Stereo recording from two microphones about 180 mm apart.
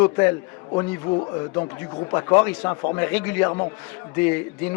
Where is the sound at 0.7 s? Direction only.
30° left (ahead or behind).